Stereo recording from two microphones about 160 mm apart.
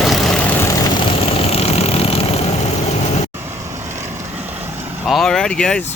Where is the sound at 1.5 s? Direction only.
40° left (ahead or behind).